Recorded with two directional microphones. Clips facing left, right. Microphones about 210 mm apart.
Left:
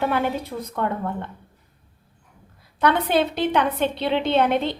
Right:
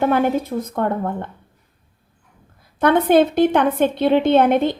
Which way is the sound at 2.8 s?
50° right (ahead or behind).